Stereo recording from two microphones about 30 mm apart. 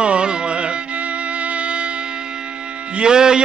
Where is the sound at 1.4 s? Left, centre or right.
Right.